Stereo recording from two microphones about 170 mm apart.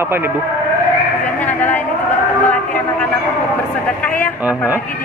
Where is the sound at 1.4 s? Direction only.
10° left (ahead or behind).